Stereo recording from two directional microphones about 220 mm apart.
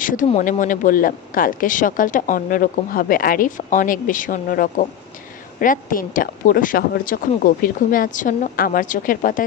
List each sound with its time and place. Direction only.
0.0 s speech: 40° left (ahead or behind)